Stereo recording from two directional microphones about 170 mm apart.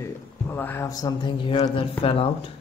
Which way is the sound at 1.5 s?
35° left (ahead or behind).